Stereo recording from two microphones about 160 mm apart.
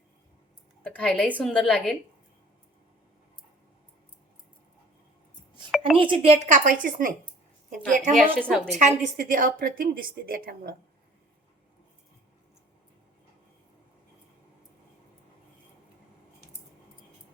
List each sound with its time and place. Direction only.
0.8 s a woman's voice: 5° left (ahead or behind)
6.0 s a woman's voice: 35° right (ahead or behind); by 7.1 s 55° right (ahead or behind)
8.1 s a woman's voice: 5° left (ahead or behind)
8.7 s a woman's voice: 50° right (ahead or behind); by 10.8 s 65° right (ahead or behind)